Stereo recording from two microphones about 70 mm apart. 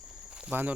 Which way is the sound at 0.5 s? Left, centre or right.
Right.